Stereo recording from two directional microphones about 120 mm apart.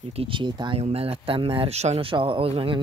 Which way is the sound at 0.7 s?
55° right (ahead or behind).